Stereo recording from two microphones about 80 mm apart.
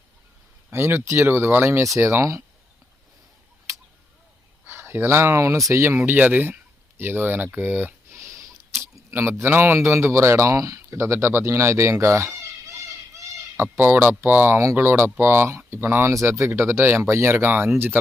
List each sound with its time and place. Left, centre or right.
0.7 s speech: right
4.6 s speech: right
6.0 s speech: right
8.1 s a sound: right
9.4 s speech: right